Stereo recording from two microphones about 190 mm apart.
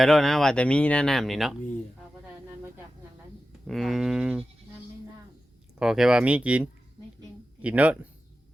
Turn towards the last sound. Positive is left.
turn(degrees=-5)  # may be behind; listen again after turning